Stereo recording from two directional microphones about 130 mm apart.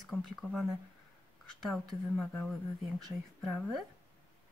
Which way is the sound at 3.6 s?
Centre (ahead or behind).